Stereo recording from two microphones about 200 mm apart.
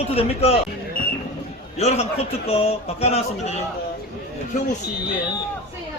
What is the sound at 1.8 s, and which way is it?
A man's voice, 30° left (ahead or behind).